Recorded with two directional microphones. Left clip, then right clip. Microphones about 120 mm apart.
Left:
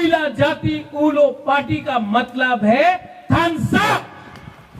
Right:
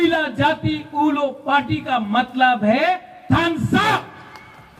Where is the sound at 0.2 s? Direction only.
40° right (ahead or behind).